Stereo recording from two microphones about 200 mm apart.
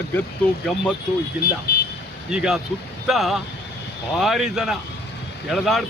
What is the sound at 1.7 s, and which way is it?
Vehicle, 50° left (ahead or behind).